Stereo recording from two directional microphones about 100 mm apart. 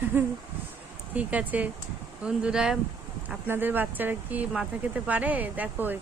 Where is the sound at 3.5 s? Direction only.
20° right (ahead or behind).